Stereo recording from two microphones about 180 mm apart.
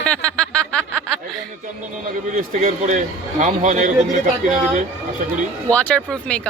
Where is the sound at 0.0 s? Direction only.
5° left (ahead or behind).